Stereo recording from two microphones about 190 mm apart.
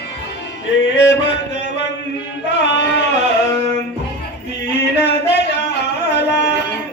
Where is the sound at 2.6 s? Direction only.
65° left (ahead or behind).